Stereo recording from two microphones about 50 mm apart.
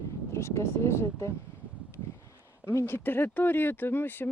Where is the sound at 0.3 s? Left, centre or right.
Left.